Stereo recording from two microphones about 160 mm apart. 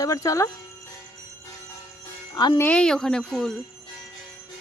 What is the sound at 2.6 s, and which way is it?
Speech, 5° left (ahead or behind).